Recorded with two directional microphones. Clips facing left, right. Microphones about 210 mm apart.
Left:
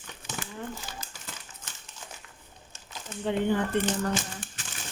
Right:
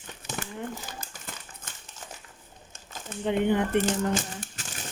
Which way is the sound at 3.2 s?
20° right (ahead or behind).